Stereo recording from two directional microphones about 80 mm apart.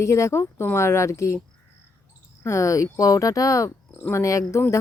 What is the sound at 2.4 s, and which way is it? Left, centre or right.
Speech, left.